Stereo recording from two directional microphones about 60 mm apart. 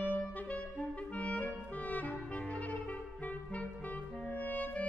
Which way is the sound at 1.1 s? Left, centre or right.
Left.